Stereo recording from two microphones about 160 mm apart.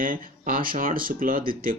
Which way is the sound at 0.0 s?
60° right (ahead or behind).